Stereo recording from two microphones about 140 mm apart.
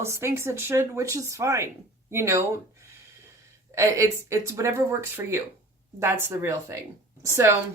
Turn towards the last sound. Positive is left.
turn(degrees=-20)  # may be behind; listen again after turning